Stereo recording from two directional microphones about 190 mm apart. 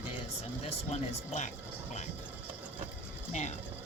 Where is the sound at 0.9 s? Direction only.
35° left (ahead or behind).